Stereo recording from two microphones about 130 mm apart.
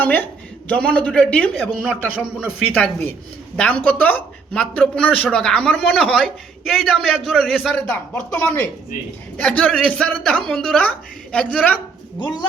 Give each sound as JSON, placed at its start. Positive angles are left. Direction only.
{"t": 0.0, "sound": "a woman's voice", "side_deg": 15}
{"t": 1.5, "sound": "a man's voice", "side_deg": -5}
{"t": 2.7, "sound": "a woman's voice", "side_deg": 15}
{"t": 7.7, "sound": "a woman's voice", "side_deg": 10}
{"t": 12.2, "sound": "a man's voice", "side_deg": 35}